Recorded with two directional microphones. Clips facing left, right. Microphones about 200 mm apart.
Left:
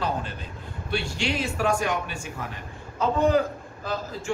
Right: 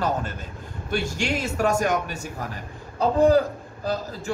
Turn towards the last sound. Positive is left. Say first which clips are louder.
# right 2 dB
turn(degrees=-35)  # may be behind; listen again after turning